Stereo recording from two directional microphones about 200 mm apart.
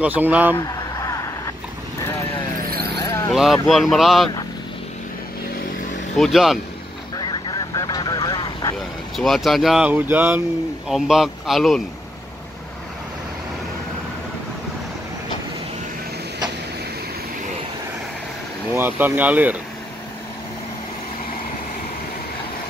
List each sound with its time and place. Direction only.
0.0 s speech: 5° right (ahead or behind)
0.6 s a sound: 20° left (ahead or behind)
2.5 s a sound: 45° right (ahead or behind)
3.3 s speech: centre (ahead or behind)
6.1 s speech: centre (ahead or behind)
7.2 s vehicle: 20° left (ahead or behind)
9.1 s speech: centre (ahead or behind)
18.8 s speech: 10° right (ahead or behind)